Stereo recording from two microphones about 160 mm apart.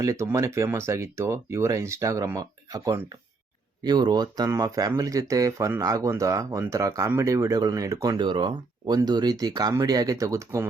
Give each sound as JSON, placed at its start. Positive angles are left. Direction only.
{"t": 0.0, "sound": "speech", "side_deg": -20}